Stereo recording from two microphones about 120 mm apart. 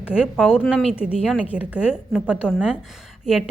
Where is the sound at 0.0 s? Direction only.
5° right (ahead or behind).